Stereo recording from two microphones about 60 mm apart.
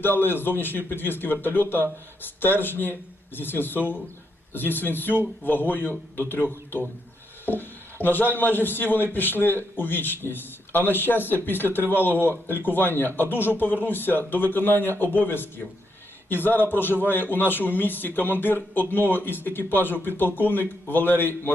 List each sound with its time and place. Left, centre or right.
0.0 s a man's voice: left